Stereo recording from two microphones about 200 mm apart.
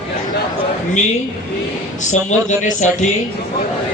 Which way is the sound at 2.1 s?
35° left (ahead or behind).